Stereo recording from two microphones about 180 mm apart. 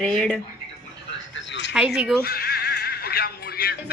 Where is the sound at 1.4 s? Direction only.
85° left.